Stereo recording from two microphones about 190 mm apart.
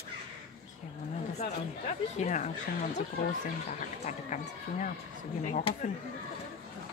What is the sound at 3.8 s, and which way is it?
Speech, 40° left (ahead or behind).